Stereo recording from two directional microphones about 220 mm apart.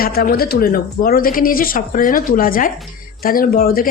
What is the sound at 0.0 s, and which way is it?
A woman's voice, 45° left (ahead or behind).